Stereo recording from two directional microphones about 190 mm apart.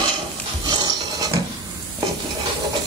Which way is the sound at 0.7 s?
20° right (ahead or behind).